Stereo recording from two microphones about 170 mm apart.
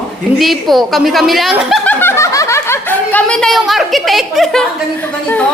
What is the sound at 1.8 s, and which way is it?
Snicker, 15° left (ahead or behind).